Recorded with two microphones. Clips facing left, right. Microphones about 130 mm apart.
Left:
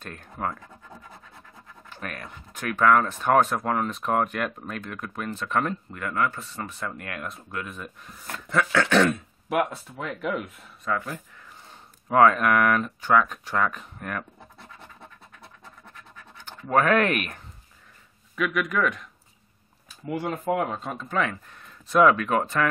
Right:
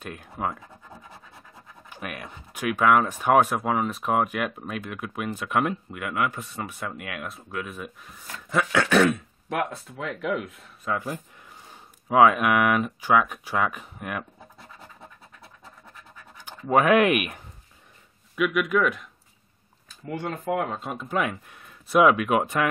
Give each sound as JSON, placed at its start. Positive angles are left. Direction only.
{"t": 0.0, "sound": "speech", "side_deg": -10}
{"t": 1.9, "sound": "speech", "side_deg": -15}
{"t": 10.9, "sound": "speech", "side_deg": -20}
{"t": 12.1, "sound": "speech", "side_deg": -10}
{"t": 16.4, "sound": "speech", "side_deg": -15}
{"t": 18.3, "sound": "speech", "side_deg": -5}